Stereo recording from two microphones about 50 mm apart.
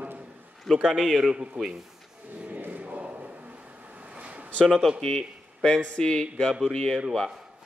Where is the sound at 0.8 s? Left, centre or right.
Centre.